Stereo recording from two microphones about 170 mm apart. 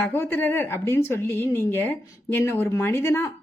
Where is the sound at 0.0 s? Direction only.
10° left (ahead or behind).